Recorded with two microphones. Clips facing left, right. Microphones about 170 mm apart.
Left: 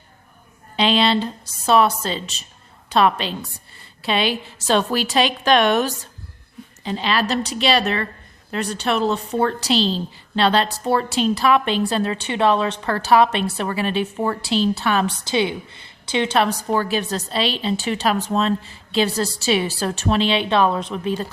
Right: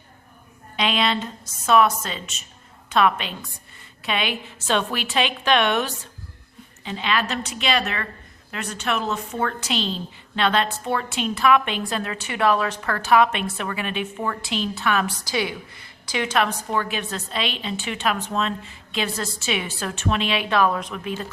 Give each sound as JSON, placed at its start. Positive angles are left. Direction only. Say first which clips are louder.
{"t": 0.8, "sound": "a woman's voice", "louder": "left 5 dB", "side_deg": 30}